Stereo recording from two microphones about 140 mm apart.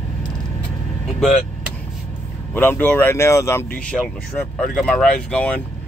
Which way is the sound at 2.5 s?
15° left (ahead or behind).